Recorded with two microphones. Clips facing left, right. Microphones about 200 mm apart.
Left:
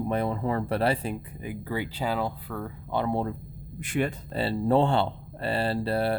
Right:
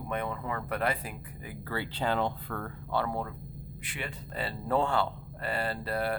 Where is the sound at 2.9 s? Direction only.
20° left (ahead or behind).